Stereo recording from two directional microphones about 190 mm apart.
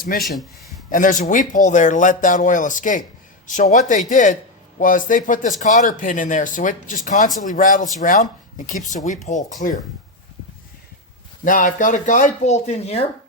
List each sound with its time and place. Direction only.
0.2 s speech: centre (ahead or behind)
0.9 s speech: 45° left (ahead or behind)
11.4 s speech: 45° left (ahead or behind)